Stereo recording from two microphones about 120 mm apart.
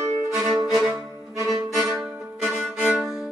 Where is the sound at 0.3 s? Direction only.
Centre (ahead or behind).